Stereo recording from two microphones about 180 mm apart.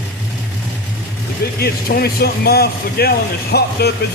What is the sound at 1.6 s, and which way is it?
Speech, 60° left (ahead or behind).